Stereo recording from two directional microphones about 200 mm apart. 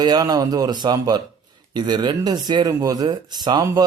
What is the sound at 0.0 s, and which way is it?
Speech, 20° right (ahead or behind).